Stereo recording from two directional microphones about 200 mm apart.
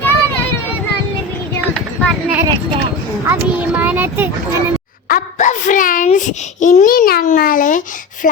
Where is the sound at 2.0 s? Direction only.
5° right (ahead or behind).